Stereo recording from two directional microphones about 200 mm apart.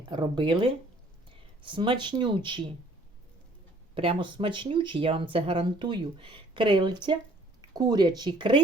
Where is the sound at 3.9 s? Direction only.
25° right (ahead or behind).